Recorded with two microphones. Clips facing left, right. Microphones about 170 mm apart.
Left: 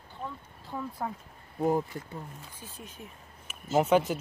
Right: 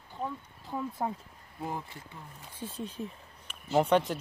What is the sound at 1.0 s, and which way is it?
Speech, 20° right (ahead or behind).